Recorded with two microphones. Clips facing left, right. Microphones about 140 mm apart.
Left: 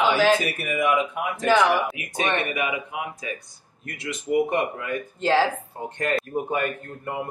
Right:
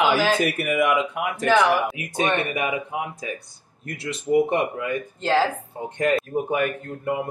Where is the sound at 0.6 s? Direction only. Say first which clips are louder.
Right 4 dB; 70° right (ahead or behind).